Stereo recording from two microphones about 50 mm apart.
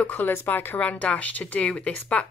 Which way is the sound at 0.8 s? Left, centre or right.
Left.